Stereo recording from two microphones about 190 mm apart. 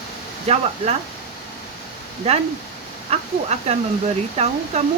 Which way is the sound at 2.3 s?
35° right (ahead or behind).